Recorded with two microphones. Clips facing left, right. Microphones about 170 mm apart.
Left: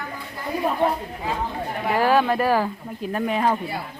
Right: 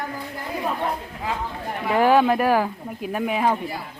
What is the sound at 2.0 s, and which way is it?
Speech, 15° right (ahead or behind).